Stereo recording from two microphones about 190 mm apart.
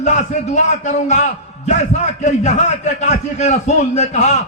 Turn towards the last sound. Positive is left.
turn(degrees=35)  # may be behind; listen again after turning